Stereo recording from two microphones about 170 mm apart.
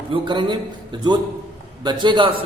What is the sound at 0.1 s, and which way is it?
A man's voice, 30° right (ahead or behind).